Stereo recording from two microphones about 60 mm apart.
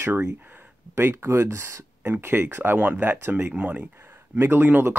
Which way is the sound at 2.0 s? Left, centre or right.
Right.